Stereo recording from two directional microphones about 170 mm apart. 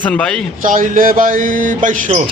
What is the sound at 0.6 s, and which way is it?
A man's voice, 55° right (ahead or behind).